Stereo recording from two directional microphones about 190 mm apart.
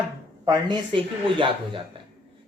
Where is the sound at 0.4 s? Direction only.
25° right (ahead or behind).